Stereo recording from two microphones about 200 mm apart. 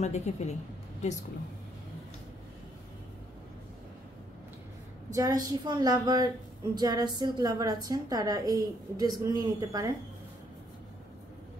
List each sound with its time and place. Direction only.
0.0 s a woman's voice: 35° left (ahead or behind)
5.1 s a woman's voice: 20° right (ahead or behind)